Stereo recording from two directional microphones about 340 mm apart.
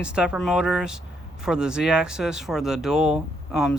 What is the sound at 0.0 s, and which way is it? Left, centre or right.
Speech, centre.